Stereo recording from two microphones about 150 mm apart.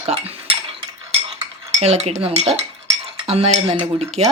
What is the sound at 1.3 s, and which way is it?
Cutlery, 45° right (ahead or behind).